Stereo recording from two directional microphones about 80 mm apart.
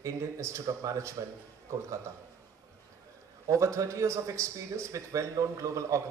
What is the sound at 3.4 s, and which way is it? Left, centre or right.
A man's voice, right.